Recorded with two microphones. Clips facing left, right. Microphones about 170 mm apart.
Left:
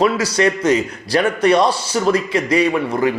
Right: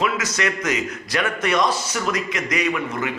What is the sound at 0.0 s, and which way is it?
A man's voice, 30° left (ahead or behind).